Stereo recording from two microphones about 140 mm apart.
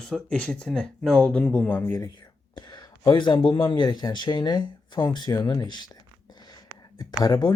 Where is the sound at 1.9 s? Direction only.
30° left (ahead or behind).